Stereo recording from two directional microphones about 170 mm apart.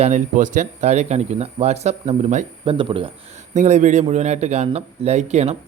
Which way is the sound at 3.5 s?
45° right (ahead or behind).